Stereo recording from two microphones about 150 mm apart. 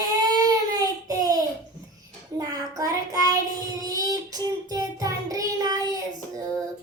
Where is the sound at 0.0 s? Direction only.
25° right (ahead or behind).